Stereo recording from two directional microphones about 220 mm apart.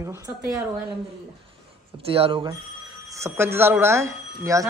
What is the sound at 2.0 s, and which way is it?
Speech, 25° right (ahead or behind).